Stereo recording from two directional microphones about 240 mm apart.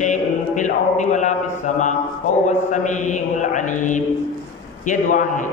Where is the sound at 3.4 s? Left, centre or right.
Left.